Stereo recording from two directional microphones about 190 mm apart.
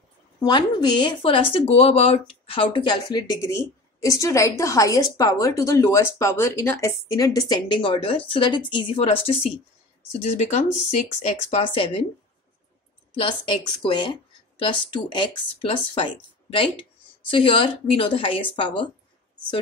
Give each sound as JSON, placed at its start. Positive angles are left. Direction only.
{"t": 0.4, "sound": "speech", "side_deg": 25}
{"t": 13.1, "sound": "speech", "side_deg": 25}